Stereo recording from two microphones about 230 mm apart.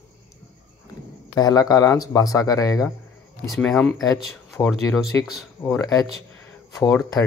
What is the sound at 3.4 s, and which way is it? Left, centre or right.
Speech, centre.